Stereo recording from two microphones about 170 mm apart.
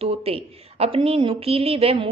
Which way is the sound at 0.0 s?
35° right (ahead or behind).